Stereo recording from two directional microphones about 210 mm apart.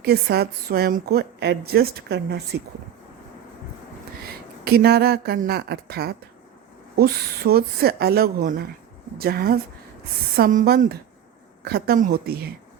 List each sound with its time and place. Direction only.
0.0 s a woman's voice: 50° right (ahead or behind)
4.6 s a woman's voice: 50° right (ahead or behind)